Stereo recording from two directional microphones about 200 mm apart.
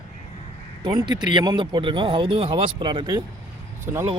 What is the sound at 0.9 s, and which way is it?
Speech, 20° right (ahead or behind).